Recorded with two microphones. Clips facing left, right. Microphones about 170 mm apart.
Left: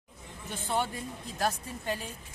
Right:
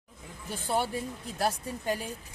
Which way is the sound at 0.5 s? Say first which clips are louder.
Right 2 dB; 10° right (ahead or behind).